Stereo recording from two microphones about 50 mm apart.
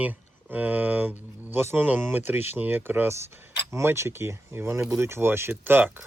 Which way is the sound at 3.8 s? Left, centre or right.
Right.